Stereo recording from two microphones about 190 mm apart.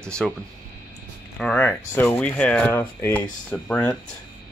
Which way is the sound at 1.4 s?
10° left (ahead or behind).